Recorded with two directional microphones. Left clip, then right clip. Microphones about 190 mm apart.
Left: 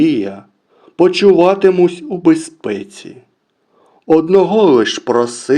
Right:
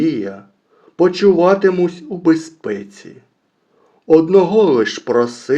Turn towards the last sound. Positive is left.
turn(degrees=30)  # may be behind; listen again after turning